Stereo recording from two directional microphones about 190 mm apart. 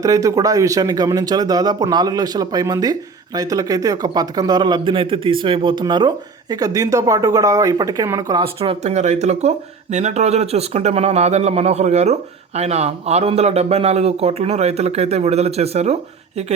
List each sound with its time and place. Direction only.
0.0 s a man's voice: 15° right (ahead or behind); by 16.0 s 35° right (ahead or behind)